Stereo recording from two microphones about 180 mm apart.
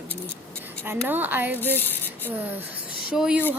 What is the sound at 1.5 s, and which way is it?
Speech, 10° left (ahead or behind).